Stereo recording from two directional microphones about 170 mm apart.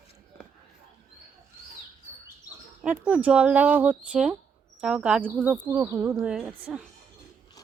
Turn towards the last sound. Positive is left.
turn(degrees=-10)  # may be behind; listen again after turning